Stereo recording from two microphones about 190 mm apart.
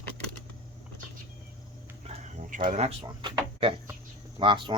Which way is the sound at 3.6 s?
30° right (ahead or behind).